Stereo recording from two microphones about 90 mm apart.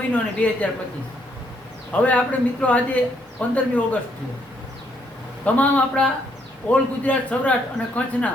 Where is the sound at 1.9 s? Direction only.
15° left (ahead or behind).